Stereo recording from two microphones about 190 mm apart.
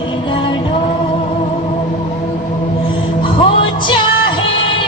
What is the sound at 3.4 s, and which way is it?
Music, 25° left (ahead or behind).